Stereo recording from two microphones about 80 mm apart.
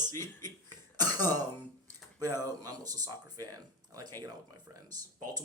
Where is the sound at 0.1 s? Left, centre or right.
Left.